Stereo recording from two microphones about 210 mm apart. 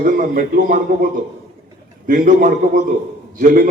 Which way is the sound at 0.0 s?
40° right (ahead or behind).